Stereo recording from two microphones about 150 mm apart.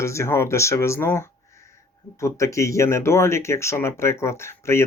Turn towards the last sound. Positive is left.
turn(degrees=15)  # may be behind; listen again after turning